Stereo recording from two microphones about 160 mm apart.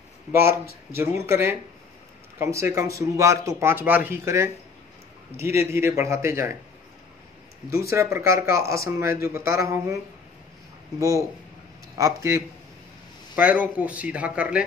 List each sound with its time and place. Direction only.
0.3 s a man's voice: 15° right (ahead or behind)
7.9 s a man's voice: 20° right (ahead or behind)
11.0 s a man's voice: 20° right (ahead or behind)
13.4 s speech: 10° right (ahead or behind)